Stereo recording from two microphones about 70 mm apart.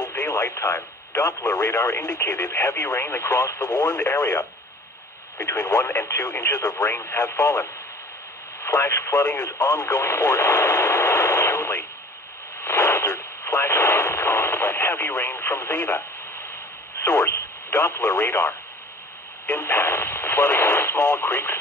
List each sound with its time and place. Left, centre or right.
0.2 s speech: left
3.8 s speech: left
12.5 s radio: left
17.0 s speech: left